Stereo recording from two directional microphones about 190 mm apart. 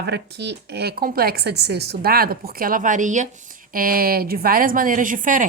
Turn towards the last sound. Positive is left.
turn(degrees=-45)  # may be behind; listen again after turning